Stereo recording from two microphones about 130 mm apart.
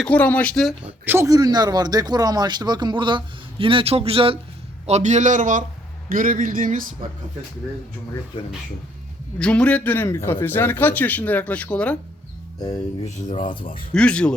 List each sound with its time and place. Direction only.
0.0 s a man's voice: 10° left (ahead or behind)
0.9 s speech: 15° right (ahead or behind)
1.3 s speech: 30° right (ahead or behind); by 4.4 s 45° right (ahead or behind)
4.9 s speech: 60° right (ahead or behind); by 6.8 s 90° right
9.4 s a man's voice: 10° left (ahead or behind)
12.5 s speech: 30° left (ahead or behind)
13.9 s a man's voice: 10° left (ahead or behind)